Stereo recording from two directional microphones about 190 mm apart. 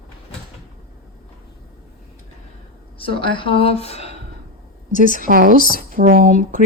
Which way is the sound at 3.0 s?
25° left (ahead or behind).